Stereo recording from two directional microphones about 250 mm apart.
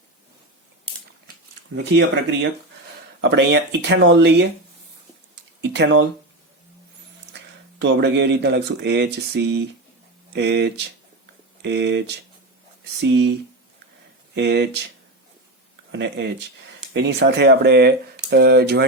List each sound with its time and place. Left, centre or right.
1.7 s speech: right
5.6 s speech: right
7.8 s speech: right
14.3 s speech: right
15.9 s speech: right